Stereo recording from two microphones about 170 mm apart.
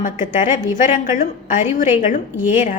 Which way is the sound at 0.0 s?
45° left (ahead or behind).